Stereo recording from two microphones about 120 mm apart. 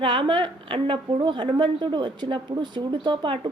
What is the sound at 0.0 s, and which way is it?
A woman's voice, 45° right (ahead or behind).